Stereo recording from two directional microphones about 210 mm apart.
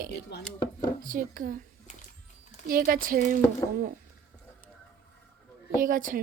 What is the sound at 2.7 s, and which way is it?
Speech, 45° right (ahead or behind).